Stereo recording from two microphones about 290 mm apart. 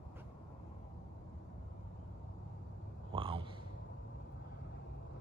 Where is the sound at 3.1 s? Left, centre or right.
Centre.